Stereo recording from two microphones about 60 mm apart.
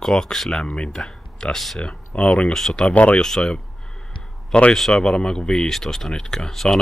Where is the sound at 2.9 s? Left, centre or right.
Left.